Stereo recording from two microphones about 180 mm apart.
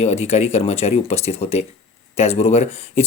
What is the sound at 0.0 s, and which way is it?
Speech, 35° left (ahead or behind).